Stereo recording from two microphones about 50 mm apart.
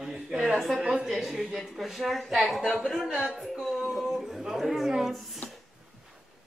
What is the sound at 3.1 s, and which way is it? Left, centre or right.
A woman's voice, centre.